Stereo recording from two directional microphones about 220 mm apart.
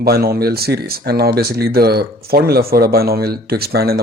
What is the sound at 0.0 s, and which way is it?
Speech, 45° right (ahead or behind).